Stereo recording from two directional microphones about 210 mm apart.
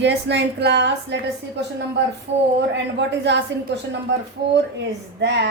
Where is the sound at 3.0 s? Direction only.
55° right (ahead or behind).